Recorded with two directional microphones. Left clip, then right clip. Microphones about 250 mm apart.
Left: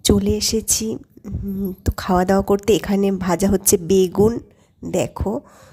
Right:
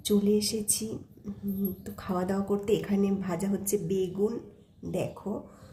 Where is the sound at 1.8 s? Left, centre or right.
Left.